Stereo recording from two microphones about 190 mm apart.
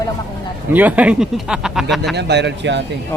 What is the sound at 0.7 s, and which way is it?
Speech, 10° right (ahead or behind).